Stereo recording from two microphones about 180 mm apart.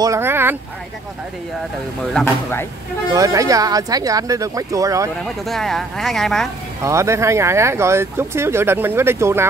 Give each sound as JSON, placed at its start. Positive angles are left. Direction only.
{"t": 0.0, "sound": "speech", "side_deg": -15}
{"t": 3.1, "sound": "speech", "side_deg": -20}
{"t": 5.2, "sound": "speech", "side_deg": 0}
{"t": 6.8, "sound": "speech", "side_deg": -15}